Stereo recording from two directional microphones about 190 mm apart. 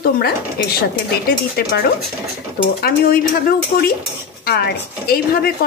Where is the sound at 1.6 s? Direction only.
55° left (ahead or behind).